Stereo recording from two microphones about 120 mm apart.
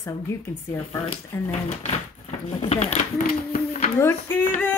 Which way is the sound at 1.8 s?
55° left (ahead or behind).